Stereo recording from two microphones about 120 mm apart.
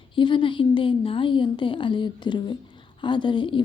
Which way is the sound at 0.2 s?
45° left (ahead or behind).